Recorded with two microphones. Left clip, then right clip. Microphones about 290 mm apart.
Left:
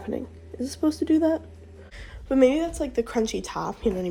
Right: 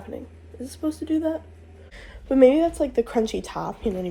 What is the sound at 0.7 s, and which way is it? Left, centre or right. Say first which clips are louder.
Speech: left 3 dB; left.